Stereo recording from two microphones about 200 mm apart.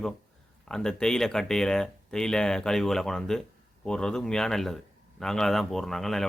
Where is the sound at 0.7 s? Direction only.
5° left (ahead or behind).